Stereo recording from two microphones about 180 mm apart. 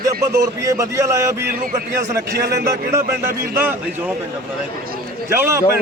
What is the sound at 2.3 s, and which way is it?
Speech, 65° right (ahead or behind).